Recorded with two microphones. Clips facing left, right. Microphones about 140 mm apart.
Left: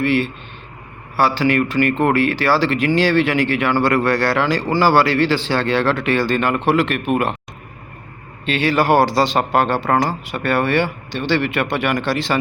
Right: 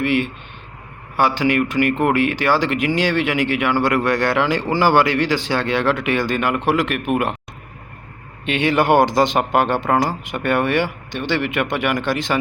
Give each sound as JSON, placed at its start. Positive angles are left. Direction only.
{"t": 0.0, "sound": "speech", "side_deg": -15}
{"t": 8.4, "sound": "speech", "side_deg": -20}